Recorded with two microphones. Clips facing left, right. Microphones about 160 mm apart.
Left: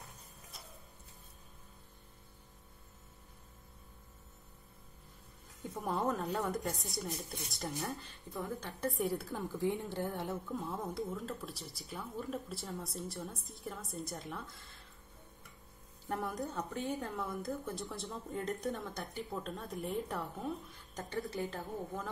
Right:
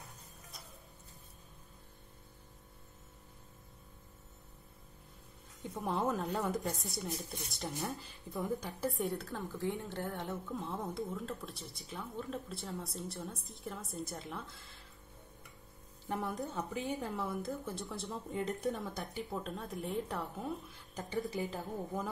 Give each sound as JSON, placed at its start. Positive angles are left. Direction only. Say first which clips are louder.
{"t": 5.6, "sound": "speech", "louder": "right 1 dB", "side_deg": 0}
{"t": 9.3, "sound": "a woman's voice", "louder": "left 2 dB", "side_deg": 15}
{"t": 10.5, "sound": "speech", "louder": "even", "side_deg": 0}
{"t": 16.1, "sound": "speech", "louder": "even", "side_deg": 0}